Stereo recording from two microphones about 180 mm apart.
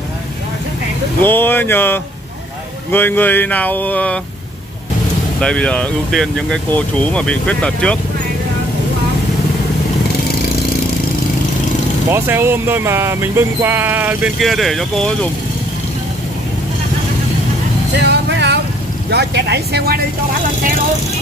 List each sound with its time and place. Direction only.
1.2 s speech: 10° left (ahead or behind)
5.4 s speech: 5° left (ahead or behind)
12.1 s speech: 15° right (ahead or behind)
17.9 s music: 70° right (ahead or behind)
19.0 s speech: 65° right (ahead or behind)